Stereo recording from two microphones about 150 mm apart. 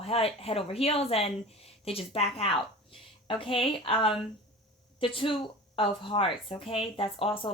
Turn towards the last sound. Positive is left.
turn(degrees=35)  # may be behind; listen again after turning